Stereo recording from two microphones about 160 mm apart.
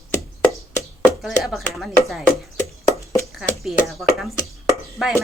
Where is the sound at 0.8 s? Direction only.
Centre (ahead or behind).